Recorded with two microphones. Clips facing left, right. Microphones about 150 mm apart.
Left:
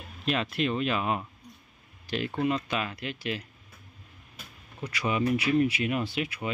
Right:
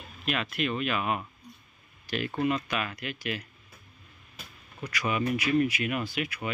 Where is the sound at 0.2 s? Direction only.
30° left (ahead or behind).